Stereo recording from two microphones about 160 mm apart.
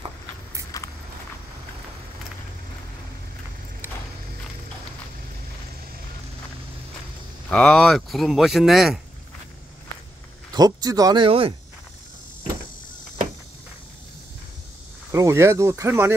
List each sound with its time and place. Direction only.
0.7 s walk: 20° left (ahead or behind)
3.8 s a sound: 15° right (ahead or behind)
7.4 s speech: 5° left (ahead or behind)
10.5 s speech: 25° right (ahead or behind)
11.2 s speech: 35° right (ahead or behind)
15.0 s speech: 20° right (ahead or behind)